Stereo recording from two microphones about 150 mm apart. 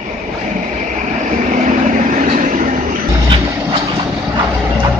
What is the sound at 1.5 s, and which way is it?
Vehicle, 60° right (ahead or behind).